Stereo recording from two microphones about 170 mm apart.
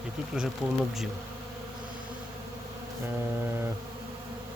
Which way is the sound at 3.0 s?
15° right (ahead or behind).